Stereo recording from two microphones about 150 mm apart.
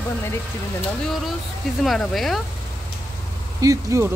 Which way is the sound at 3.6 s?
20° right (ahead or behind).